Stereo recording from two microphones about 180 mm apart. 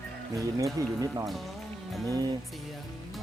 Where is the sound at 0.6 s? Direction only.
20° right (ahead or behind).